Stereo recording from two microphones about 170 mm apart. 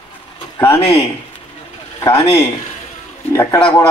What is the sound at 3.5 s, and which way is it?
Speech, 25° left (ahead or behind).